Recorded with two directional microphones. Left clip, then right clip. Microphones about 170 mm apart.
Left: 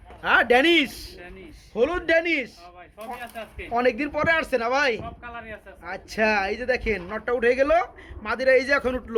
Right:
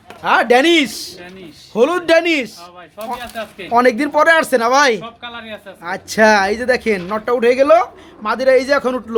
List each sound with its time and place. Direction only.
0.2 s speech: centre (ahead or behind)
1.7 s speech: 20° right (ahead or behind)
3.7 s speech: 25° right (ahead or behind)
5.2 s speech: 45° right (ahead or behind)
5.8 s speech: 25° right (ahead or behind); by 9.0 s centre (ahead or behind)